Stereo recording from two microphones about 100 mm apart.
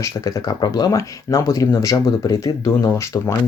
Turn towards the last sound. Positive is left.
turn(degrees=30)  # may be behind; listen again after turning